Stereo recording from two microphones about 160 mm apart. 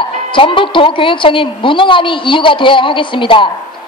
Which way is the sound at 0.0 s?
30° left (ahead or behind).